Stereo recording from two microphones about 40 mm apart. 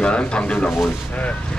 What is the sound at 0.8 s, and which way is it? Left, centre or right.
Speech, left.